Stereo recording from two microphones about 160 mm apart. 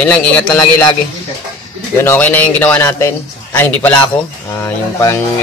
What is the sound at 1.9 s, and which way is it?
A man's voice, 15° left (ahead or behind).